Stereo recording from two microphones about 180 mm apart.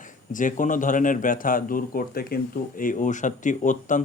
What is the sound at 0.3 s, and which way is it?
Speech, 45° left (ahead or behind).